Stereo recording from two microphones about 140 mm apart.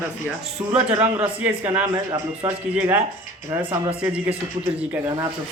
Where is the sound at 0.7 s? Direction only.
10° right (ahead or behind).